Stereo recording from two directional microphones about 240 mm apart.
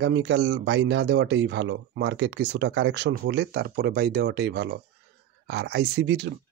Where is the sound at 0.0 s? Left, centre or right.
Right.